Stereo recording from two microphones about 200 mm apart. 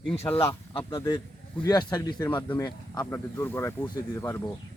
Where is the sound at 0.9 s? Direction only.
20° left (ahead or behind).